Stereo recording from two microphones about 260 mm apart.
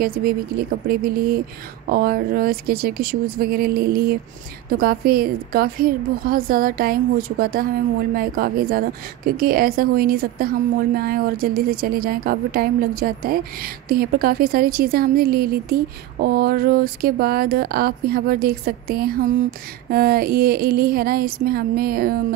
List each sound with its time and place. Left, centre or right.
0.0 s a woman's voice: right